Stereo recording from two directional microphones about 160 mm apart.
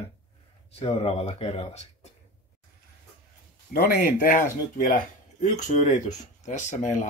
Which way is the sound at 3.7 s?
65° left (ahead or behind).